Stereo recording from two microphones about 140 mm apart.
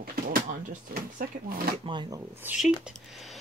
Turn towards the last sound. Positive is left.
turn(degrees=0)  # may be behind; listen again after turning